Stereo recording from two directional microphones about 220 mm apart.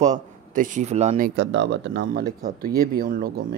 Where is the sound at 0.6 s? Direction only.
35° right (ahead or behind).